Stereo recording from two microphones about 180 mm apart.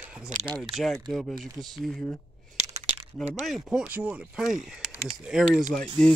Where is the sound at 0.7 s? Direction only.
Centre (ahead or behind).